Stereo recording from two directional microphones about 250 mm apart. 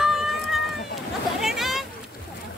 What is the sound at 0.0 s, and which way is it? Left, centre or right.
Cat, centre.